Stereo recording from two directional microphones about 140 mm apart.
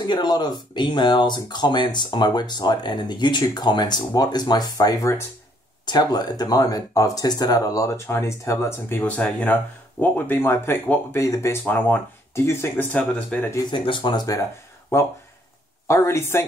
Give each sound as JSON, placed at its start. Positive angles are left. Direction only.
{"t": 0.0, "sound": "speech", "side_deg": 30}
{"t": 13.7, "sound": "speech", "side_deg": 35}